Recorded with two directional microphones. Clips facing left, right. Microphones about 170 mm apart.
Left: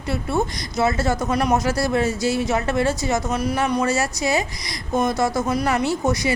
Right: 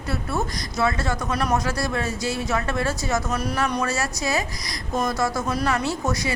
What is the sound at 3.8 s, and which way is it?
Speech, 20° left (ahead or behind).